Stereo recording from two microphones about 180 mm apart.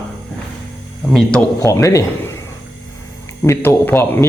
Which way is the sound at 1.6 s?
15° left (ahead or behind).